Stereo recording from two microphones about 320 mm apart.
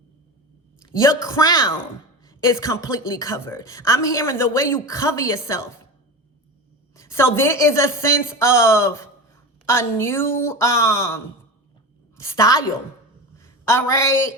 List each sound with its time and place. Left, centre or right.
0.8 s a woman's voice: centre
6.9 s a woman's voice: centre
13.3 s a sound: centre